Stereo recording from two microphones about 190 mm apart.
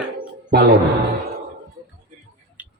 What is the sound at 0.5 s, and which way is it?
Speech, 60° right (ahead or behind).